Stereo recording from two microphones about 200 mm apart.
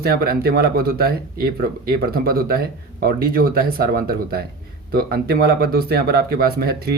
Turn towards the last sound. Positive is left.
turn(degrees=-50)  # may be behind; listen again after turning